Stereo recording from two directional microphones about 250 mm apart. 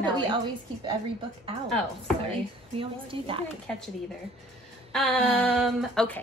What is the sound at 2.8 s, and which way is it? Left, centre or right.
Speech, right.